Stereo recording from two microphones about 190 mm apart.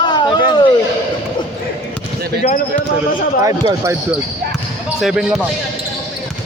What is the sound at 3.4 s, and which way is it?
Speech, 15° right (ahead or behind).